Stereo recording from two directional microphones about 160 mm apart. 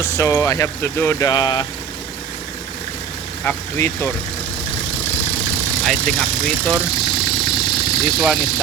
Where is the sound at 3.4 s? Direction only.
15° left (ahead or behind).